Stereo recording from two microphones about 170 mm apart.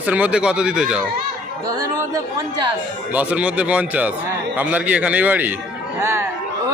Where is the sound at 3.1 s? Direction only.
10° right (ahead or behind).